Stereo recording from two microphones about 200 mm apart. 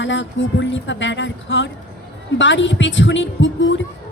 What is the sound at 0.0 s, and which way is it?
A woman's voice, 65° left (ahead or behind).